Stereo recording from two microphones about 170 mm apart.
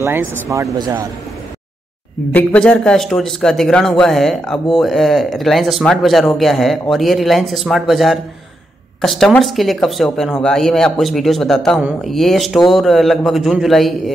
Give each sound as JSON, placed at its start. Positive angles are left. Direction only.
{"t": 0.0, "sound": "speech", "side_deg": -15}
{"t": 2.3, "sound": "speech", "side_deg": 10}